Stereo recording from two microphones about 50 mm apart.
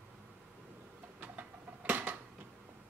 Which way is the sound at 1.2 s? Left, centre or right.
Right.